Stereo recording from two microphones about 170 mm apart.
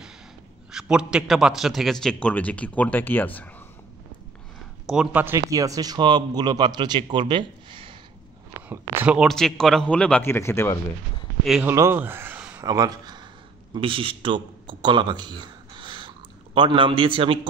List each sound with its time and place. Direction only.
0.7 s a man's voice: 5° right (ahead or behind); by 3.3 s 10° left (ahead or behind)
4.8 s a man's voice: 5° right (ahead or behind); by 7.9 s 30° right (ahead or behind)
8.6 s a sound: 10° right (ahead or behind)
9.3 s speech: 5° left (ahead or behind)
11.6 s speech: 15° right (ahead or behind)
12.6 s a man's voice: 25° right (ahead or behind)